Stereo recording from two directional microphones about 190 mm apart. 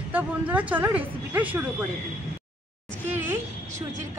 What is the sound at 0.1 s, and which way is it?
Speech, 10° right (ahead or behind).